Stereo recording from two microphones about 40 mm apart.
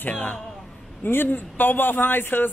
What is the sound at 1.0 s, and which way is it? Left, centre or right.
Speech, left.